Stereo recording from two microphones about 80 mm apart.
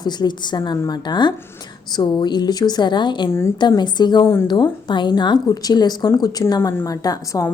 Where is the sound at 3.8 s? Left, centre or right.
Left.